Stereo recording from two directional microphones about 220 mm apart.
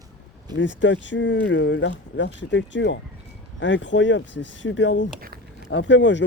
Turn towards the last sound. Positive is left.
turn(degrees=55)  # may be behind; listen again after turning